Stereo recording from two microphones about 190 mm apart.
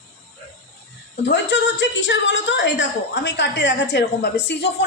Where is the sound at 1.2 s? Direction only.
65° left (ahead or behind).